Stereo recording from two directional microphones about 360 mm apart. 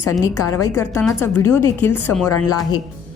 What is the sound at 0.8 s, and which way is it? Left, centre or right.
Speech, centre.